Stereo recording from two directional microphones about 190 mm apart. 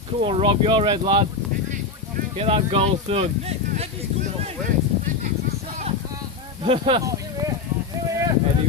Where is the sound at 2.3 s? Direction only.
30° right (ahead or behind).